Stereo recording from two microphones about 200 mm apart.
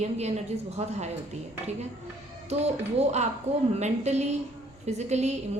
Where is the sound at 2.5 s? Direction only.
35° right (ahead or behind).